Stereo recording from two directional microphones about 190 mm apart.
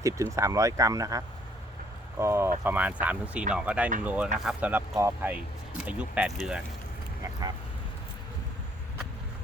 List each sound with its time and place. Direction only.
0.0 s speech: 15° right (ahead or behind); by 6.7 s centre (ahead or behind)